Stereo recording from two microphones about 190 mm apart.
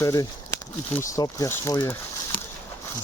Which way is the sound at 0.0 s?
15° left (ahead or behind).